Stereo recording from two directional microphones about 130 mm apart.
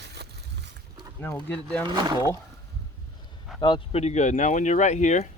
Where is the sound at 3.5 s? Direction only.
Centre (ahead or behind).